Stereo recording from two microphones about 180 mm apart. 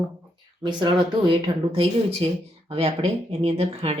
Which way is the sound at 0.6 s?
25° right (ahead or behind).